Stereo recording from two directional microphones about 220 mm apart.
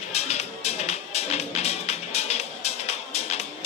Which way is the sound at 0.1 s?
30° left (ahead or behind).